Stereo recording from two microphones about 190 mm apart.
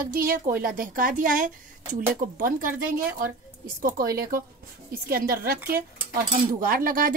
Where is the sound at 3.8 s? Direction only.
50° right (ahead or behind).